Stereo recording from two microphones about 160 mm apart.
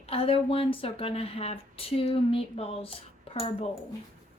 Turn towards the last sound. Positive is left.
turn(degrees=40)  # may be behind; listen again after turning